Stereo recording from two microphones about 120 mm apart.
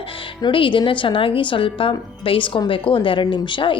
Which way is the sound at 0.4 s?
45° left (ahead or behind).